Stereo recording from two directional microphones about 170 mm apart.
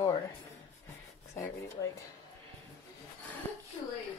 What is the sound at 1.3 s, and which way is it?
Speech, 15° left (ahead or behind).